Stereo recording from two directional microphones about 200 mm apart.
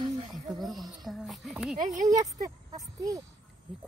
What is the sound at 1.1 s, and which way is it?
Speech, centre (ahead or behind).